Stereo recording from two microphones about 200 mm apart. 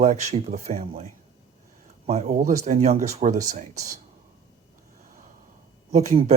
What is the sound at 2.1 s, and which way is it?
Speech, 35° right (ahead or behind).